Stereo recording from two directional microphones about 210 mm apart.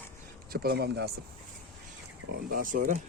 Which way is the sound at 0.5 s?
50° right (ahead or behind).